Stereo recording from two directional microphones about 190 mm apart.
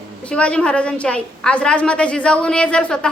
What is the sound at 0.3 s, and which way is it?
A woman's voice, 5° left (ahead or behind).